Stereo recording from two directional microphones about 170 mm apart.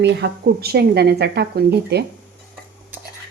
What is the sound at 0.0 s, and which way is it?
Speech, 80° right.